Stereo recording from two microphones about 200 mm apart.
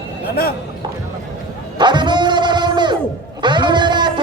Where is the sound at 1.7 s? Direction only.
20° right (ahead or behind).